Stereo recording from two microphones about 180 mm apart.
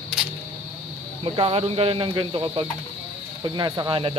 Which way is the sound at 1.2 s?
30° right (ahead or behind).